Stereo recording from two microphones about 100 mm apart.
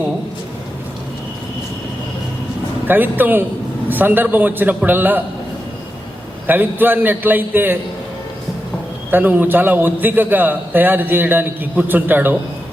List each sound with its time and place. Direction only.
2.8 s a man's voice: 20° right (ahead or behind)
6.5 s a man's voice: 20° right (ahead or behind)
9.0 s a man's voice: 20° right (ahead or behind)